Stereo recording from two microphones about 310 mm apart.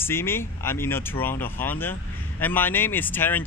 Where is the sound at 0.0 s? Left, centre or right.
Centre.